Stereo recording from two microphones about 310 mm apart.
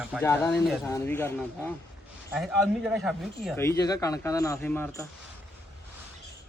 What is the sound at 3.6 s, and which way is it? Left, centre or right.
Speech, centre.